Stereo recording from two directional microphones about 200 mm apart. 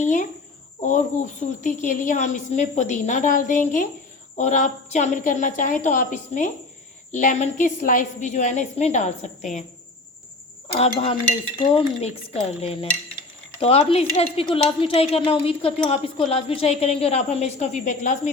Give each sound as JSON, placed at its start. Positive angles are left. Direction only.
{"t": 0.0, "sound": "a woman's voice", "side_deg": 40}
{"t": 10.8, "sound": "a woman's voice", "side_deg": 25}